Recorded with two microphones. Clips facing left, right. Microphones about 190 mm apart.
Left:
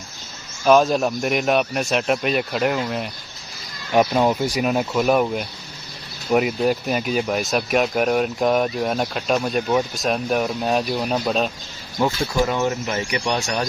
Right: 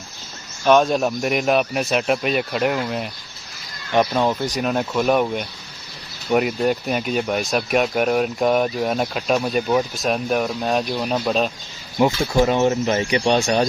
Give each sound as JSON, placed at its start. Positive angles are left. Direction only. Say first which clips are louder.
{"t": 0.6, "sound": "speech", "louder": "even", "side_deg": 0}
{"t": 11.9, "sound": "speech", "louder": "right 3 dB", "side_deg": -20}